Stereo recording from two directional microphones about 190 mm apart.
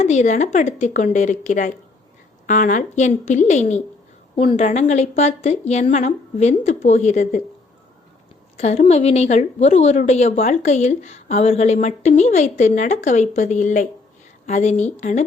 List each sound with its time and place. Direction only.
0.0 s a woman's voice: 40° left (ahead or behind)
8.5 s a woman's voice: 35° left (ahead or behind)